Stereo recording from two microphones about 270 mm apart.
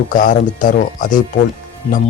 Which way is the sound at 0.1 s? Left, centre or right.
Left.